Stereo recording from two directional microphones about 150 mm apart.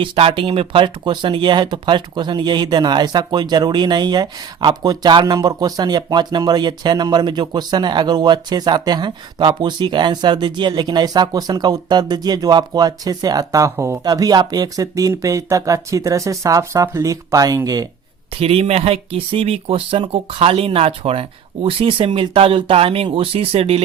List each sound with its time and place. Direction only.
0.0 s speech: 35° right (ahead or behind)
18.3 s speech: 40° right (ahead or behind)